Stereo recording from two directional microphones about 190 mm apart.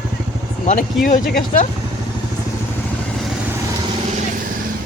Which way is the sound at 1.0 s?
45° left (ahead or behind).